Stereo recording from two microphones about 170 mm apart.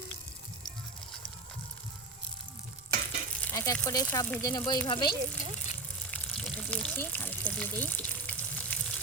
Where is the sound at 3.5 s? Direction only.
20° left (ahead or behind).